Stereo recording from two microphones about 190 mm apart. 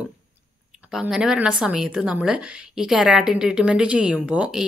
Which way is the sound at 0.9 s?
5° right (ahead or behind).